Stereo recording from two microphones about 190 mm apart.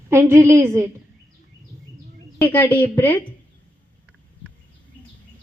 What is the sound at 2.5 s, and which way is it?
Speech, 10° left (ahead or behind).